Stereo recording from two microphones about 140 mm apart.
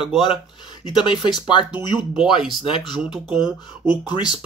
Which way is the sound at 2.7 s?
35° left (ahead or behind).